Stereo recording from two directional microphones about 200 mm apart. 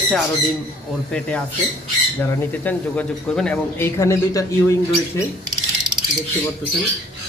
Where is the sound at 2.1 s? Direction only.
10° left (ahead or behind).